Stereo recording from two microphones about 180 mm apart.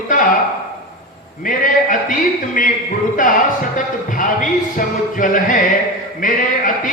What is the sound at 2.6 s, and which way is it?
Music, 50° left (ahead or behind).